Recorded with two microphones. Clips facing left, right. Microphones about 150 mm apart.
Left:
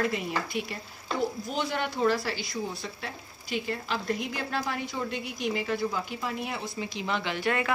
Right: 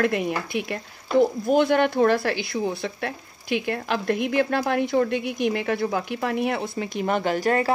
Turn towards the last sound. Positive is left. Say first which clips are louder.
# right 7 dB
turn(degrees=-40)  # may be behind; listen again after turning